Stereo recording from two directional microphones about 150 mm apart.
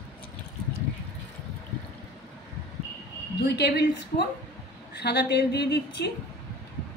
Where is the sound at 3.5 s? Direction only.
90° left.